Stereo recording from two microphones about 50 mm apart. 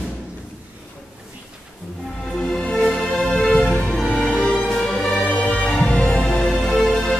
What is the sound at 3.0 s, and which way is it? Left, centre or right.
Music, centre.